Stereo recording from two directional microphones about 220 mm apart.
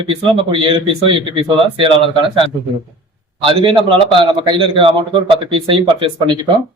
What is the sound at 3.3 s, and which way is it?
A man's voice, 20° right (ahead or behind).